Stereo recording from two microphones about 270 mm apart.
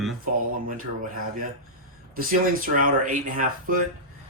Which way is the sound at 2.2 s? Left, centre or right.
Right.